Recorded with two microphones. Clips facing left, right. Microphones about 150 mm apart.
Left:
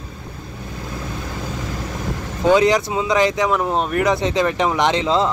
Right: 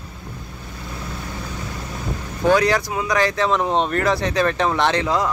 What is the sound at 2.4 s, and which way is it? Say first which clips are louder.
Speech: left 2 dB; 20° left (ahead or behind).